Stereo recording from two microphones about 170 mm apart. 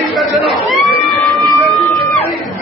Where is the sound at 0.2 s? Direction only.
Centre (ahead or behind).